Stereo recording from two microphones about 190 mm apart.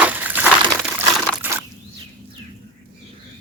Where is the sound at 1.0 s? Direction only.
10° right (ahead or behind).